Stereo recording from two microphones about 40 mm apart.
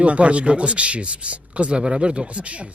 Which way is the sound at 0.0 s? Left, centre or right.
Right.